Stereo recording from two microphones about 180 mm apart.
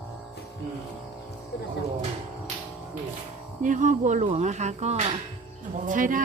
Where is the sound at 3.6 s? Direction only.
45° right (ahead or behind).